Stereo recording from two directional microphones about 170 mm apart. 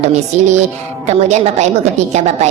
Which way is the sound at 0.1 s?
40° right (ahead or behind).